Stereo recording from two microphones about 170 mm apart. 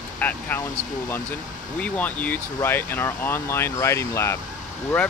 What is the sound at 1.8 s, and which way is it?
Speech, 10° left (ahead or behind).